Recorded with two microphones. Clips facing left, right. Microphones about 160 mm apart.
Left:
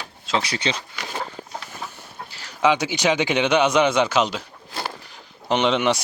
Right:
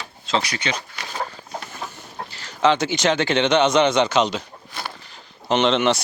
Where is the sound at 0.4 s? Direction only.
30° left (ahead or behind).